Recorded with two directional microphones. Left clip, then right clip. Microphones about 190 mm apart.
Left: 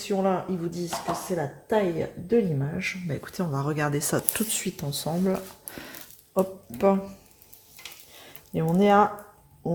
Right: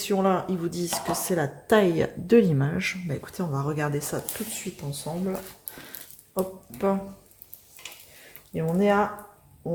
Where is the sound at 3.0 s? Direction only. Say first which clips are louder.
Left 1 dB; 15° left (ahead or behind); by 4.2 s 35° left (ahead or behind).